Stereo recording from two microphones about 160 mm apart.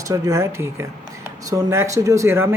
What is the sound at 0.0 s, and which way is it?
Speech, 20° right (ahead or behind).